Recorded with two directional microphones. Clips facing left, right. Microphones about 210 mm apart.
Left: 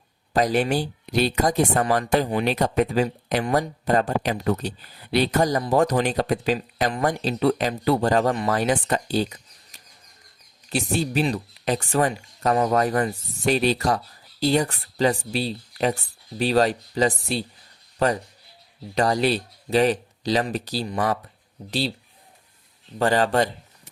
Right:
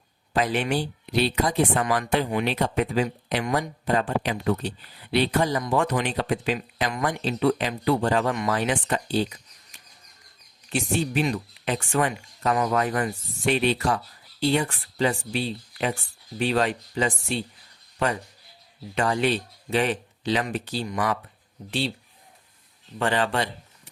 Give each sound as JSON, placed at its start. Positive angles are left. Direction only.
{"t": 0.3, "sound": "speech", "side_deg": 40}
{"t": 18.9, "sound": "speech", "side_deg": 35}
{"t": 23.0, "sound": "speech", "side_deg": 40}